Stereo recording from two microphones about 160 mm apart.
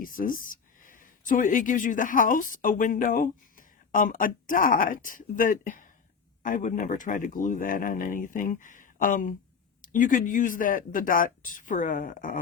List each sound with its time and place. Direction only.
0.0 s speech: 60° left (ahead or behind)